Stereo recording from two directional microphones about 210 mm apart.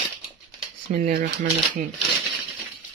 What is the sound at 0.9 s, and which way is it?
Speech, 45° right (ahead or behind).